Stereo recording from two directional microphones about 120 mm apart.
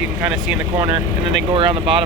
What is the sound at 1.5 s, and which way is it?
Speech, 45° right (ahead or behind).